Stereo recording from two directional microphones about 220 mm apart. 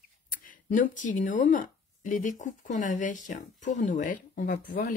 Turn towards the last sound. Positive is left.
turn(degrees=40)  # may be behind; listen again after turning